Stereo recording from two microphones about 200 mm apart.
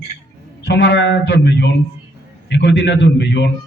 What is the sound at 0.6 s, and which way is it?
A man's voice, 55° left (ahead or behind).